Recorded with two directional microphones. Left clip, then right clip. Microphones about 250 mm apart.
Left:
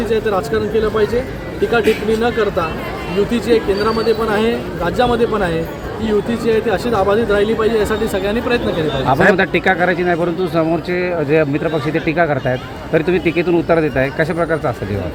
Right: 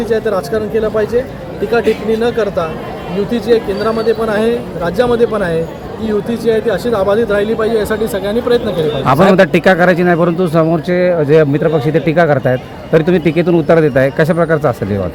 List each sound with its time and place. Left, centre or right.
0.1 s speech: centre
2.2 s speech: centre
9.0 s a man's voice: right